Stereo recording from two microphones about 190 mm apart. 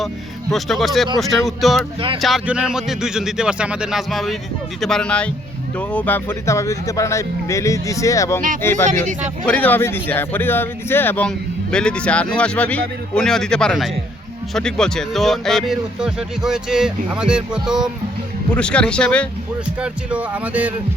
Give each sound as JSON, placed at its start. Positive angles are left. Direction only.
{"t": 0.5, "sound": "speech", "side_deg": 0}
{"t": 19.8, "sound": "speech", "side_deg": -5}